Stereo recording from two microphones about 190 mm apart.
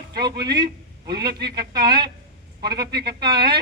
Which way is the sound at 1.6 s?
55° right (ahead or behind).